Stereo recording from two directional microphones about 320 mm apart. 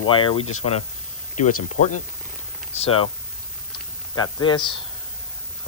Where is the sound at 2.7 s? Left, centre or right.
Centre.